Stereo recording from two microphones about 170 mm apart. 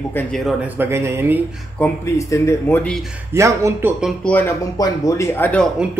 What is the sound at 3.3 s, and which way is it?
Speech, 15° right (ahead or behind).